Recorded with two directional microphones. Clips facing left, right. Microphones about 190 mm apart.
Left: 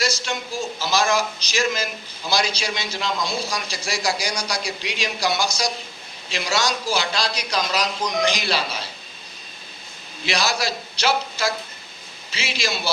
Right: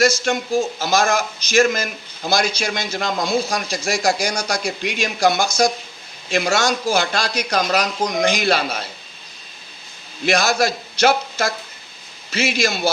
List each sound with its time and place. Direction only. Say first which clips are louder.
0.0 s a man's voice: right 8 dB; 50° right (ahead or behind)
10.2 s a man's voice: right 6 dB; 50° right (ahead or behind)